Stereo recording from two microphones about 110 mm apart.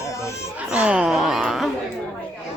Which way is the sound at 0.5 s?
10° right (ahead or behind).